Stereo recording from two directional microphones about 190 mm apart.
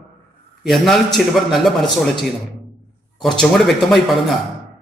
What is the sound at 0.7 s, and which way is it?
A man's voice, centre (ahead or behind).